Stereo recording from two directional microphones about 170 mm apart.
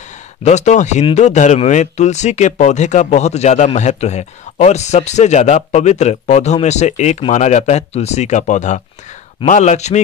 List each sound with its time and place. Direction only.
0.4 s speech: 40° left (ahead or behind)